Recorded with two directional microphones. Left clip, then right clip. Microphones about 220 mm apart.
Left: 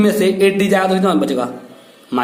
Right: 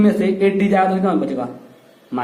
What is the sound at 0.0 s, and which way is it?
A man's voice, 20° left (ahead or behind).